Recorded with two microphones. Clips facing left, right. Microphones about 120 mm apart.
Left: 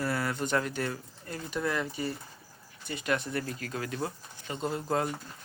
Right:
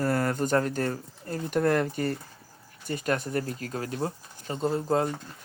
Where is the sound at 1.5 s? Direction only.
50° right (ahead or behind); by 5.0 s 30° right (ahead or behind).